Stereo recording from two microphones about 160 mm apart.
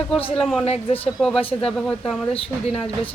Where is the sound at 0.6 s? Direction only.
35° left (ahead or behind).